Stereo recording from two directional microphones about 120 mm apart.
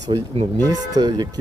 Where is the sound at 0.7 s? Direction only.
35° right (ahead or behind).